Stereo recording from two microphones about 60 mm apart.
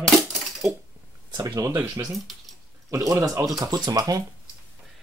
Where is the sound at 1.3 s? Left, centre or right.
Right.